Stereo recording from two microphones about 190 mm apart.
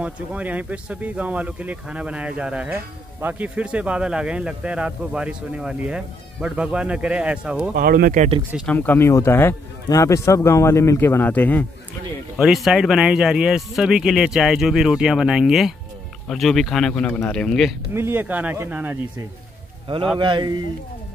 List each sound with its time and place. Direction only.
0.0 s speech: 5° right (ahead or behind)
7.7 s speech: 50° right (ahead or behind)
8.6 s speech: 10° left (ahead or behind)
12.4 s speech: centre (ahead or behind)
17.9 s speech: 10° right (ahead or behind)
20.2 s a man's voice: 25° right (ahead or behind)